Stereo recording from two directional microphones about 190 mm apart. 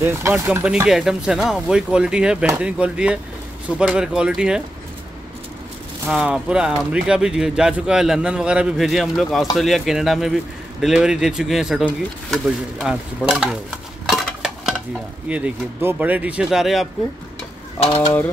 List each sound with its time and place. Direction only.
0.0 s speech: 10° right (ahead or behind)
6.0 s speech: 5° right (ahead or behind)
17.7 s mechanisms: 30° left (ahead or behind)